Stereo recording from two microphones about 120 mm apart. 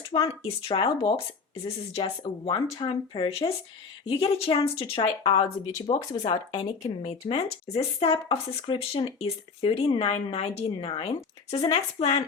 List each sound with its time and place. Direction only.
0.1 s speech: 50° left (ahead or behind)
6.2 s speech: 70° left (ahead or behind)